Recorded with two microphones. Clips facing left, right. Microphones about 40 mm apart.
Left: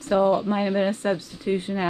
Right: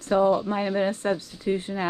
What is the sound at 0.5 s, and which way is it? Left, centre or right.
Speech, left.